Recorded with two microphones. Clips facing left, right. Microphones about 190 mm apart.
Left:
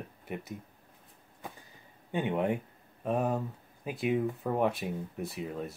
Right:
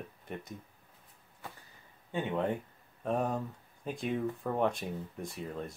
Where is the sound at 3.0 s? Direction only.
5° left (ahead or behind).